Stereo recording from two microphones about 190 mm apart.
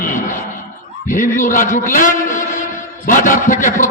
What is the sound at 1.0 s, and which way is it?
A man's voice, 45° left (ahead or behind).